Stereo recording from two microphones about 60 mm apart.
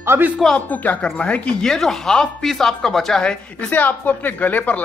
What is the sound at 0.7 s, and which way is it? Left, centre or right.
Speech, left.